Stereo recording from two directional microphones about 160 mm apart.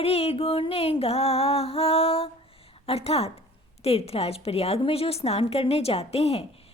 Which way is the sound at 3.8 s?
40° left (ahead or behind).